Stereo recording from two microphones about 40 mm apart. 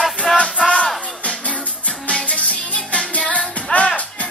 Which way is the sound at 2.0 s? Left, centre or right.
Left.